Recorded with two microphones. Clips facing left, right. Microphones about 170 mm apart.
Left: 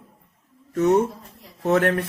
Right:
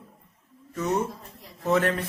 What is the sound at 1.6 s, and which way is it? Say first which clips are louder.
Speech: left 4 dB; 60° left (ahead or behind).